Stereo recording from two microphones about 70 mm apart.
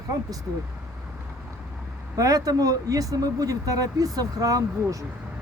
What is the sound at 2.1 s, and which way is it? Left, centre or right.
Speech, right.